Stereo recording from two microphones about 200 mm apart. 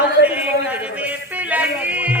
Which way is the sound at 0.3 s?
10° right (ahead or behind).